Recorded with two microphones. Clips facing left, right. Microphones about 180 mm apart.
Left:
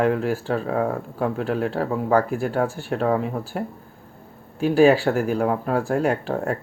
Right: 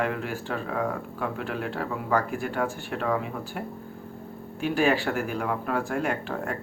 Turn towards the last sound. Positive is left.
turn(degrees=40)  # may be behind; listen again after turning